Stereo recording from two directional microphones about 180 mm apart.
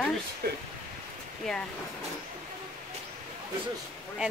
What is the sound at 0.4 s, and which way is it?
Speech, 60° right (ahead or behind).